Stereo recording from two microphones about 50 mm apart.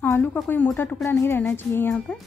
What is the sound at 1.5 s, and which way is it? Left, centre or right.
Speech, left.